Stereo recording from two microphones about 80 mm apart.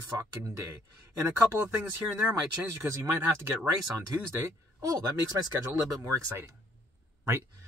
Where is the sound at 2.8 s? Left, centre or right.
Right.